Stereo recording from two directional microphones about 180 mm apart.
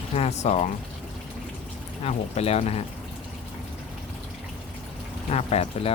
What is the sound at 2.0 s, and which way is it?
Speech, 35° left (ahead or behind).